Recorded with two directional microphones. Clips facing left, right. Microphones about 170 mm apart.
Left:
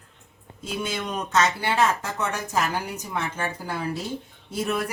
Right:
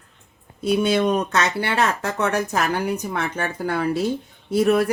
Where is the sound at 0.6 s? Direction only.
65° right (ahead or behind).